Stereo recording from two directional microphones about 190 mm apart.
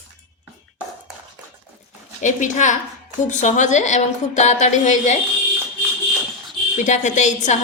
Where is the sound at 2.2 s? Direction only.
40° left (ahead or behind).